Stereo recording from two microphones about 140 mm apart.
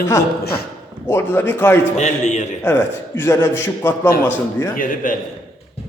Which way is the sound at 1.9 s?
55° left (ahead or behind).